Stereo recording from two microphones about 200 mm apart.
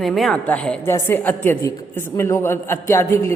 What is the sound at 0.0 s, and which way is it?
A woman's voice, centre (ahead or behind).